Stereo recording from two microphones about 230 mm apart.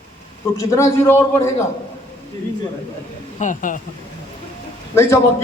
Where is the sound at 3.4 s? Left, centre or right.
Left.